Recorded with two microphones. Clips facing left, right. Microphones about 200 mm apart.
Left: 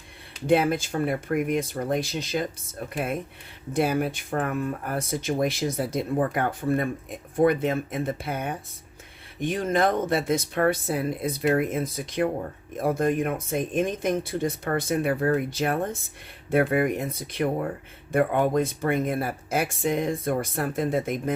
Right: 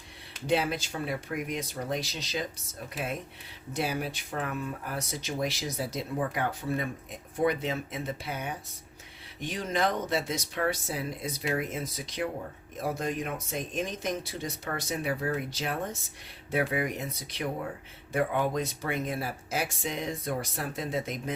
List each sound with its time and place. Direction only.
0.4 s speech: 55° left (ahead or behind)